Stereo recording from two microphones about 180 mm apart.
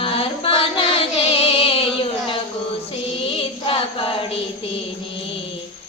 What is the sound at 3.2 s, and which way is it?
Chant, 30° left (ahead or behind).